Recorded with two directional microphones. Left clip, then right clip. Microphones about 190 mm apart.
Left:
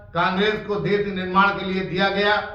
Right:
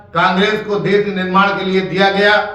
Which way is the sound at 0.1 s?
15° right (ahead or behind).